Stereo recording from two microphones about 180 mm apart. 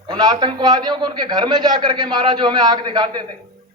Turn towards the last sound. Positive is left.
turn(degrees=-25)  # may be behind; listen again after turning